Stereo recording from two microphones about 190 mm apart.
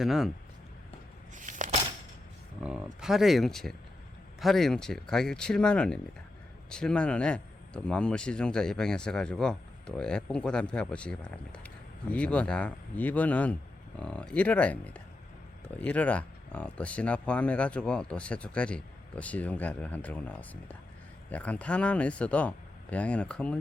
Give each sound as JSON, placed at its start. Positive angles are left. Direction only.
{"t": 0.0, "sound": "speech", "side_deg": 0}
{"t": 1.4, "sound": "a sound", "side_deg": -40}
{"t": 2.6, "sound": "speech", "side_deg": 0}